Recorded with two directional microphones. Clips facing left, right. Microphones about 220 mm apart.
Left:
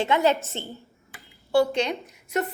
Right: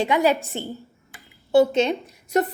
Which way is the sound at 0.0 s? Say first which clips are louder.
Right 2 dB; 15° right (ahead or behind).